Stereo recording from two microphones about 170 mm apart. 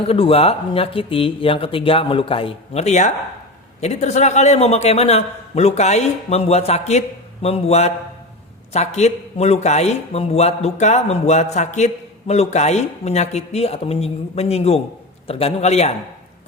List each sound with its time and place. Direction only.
0.1 s a man's voice: 35° left (ahead or behind)